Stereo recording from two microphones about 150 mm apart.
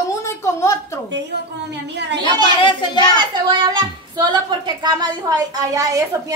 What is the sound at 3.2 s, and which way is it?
A woman's voice, 30° right (ahead or behind).